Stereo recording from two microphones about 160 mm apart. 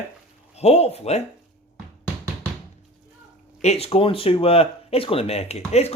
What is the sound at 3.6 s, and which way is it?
Speech, 40° left (ahead or behind).